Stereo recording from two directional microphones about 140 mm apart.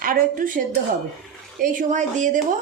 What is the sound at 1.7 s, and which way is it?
Speech, 60° right (ahead or behind).